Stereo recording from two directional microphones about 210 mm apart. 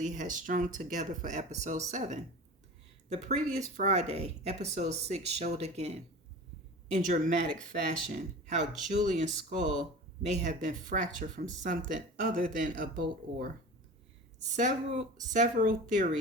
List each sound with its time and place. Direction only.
0.0 s speech: 35° right (ahead or behind)
9.6 s speech: 25° left (ahead or behind)
10.2 s speech: 35° right (ahead or behind)